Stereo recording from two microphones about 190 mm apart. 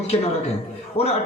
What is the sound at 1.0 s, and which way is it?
Speech, 35° left (ahead or behind).